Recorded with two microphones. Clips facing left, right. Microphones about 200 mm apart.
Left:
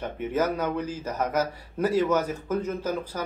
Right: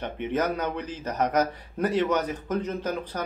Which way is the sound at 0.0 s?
5° left (ahead or behind).